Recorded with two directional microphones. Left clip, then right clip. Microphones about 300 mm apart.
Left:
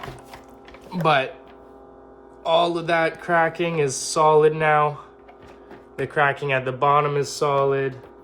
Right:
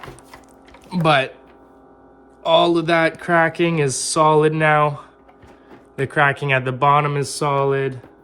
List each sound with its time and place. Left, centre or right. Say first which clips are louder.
0.9 s speech: right 3 dB; right
2.4 s speech: right 5 dB; right